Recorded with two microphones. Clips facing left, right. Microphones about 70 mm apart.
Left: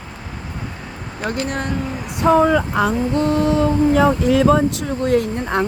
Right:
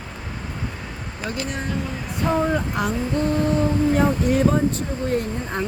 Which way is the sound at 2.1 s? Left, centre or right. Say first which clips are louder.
Left 7 dB; left.